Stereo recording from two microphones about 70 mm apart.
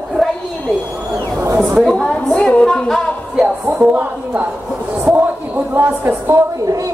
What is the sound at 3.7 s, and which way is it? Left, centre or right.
Speech, right.